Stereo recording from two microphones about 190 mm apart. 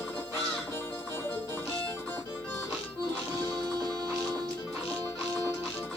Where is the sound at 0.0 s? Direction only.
10° left (ahead or behind).